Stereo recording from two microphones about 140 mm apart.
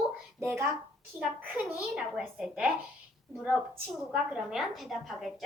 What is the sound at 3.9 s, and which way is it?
A woman's voice, 5° right (ahead or behind).